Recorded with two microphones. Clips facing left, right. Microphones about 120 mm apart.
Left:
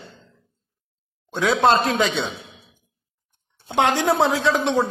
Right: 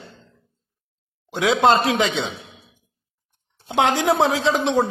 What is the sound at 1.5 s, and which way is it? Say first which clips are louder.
Speech: right 1 dB; 15° right (ahead or behind).